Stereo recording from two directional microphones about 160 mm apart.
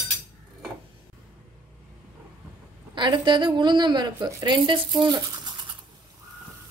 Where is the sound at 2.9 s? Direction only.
30° right (ahead or behind).